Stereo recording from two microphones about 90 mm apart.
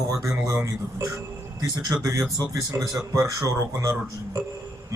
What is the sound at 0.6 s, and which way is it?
Speech, 35° right (ahead or behind).